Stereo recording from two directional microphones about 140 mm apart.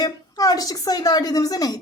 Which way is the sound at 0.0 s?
25° left (ahead or behind).